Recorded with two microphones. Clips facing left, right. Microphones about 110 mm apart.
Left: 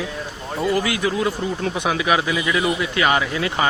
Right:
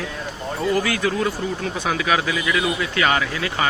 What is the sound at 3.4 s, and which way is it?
Speech, 25° left (ahead or behind).